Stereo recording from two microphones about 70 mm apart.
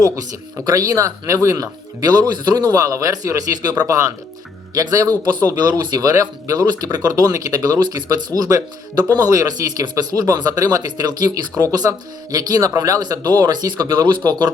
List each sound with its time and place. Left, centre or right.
0.6 s speech: right
3.8 s speech: right
8.4 s speech: right
14.3 s speech: right